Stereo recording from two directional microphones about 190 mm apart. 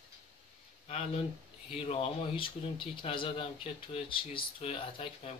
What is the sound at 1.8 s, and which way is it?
Speech, 30° left (ahead or behind).